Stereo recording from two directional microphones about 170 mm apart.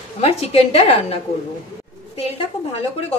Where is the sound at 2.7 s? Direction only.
35° left (ahead or behind).